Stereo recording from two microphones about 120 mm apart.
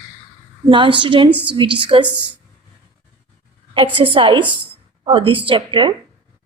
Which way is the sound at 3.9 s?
45° right (ahead or behind).